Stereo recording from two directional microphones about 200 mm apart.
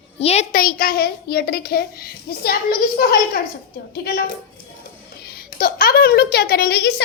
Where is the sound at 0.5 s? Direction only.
45° left (ahead or behind).